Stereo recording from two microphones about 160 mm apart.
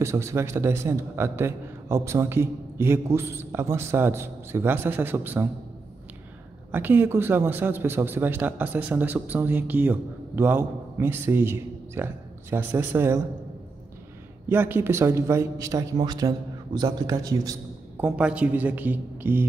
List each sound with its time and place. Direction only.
0.0 s a man's voice: 15° right (ahead or behind)
6.7 s a man's voice: 10° right (ahead or behind)
14.5 s a man's voice: 15° right (ahead or behind)
17.9 s a man's voice: 5° right (ahead or behind)